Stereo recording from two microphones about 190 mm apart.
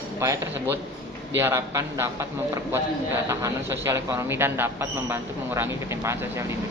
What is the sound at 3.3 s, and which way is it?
Speech, 15° right (ahead or behind).